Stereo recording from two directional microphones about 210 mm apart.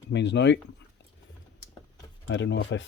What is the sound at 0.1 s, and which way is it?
Speech, 55° left (ahead or behind).